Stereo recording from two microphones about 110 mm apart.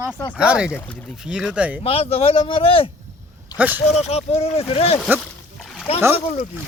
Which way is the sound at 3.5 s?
15° right (ahead or behind).